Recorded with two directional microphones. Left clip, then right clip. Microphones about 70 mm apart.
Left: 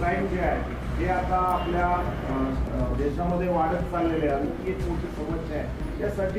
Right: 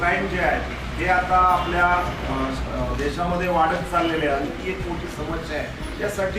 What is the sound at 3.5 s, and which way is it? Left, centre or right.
Speech, centre.